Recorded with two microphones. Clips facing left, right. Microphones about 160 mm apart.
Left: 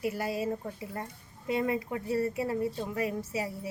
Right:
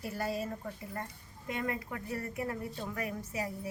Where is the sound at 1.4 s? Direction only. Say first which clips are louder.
Left 7 dB; 25° left (ahead or behind).